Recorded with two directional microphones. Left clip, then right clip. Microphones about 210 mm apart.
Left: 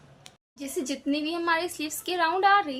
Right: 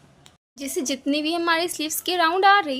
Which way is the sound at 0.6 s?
40° right (ahead or behind).